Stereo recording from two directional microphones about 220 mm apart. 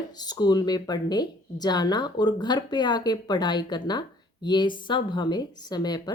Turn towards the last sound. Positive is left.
turn(degrees=20)  # may be behind; listen again after turning